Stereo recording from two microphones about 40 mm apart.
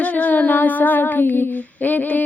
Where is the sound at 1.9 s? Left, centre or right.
Left.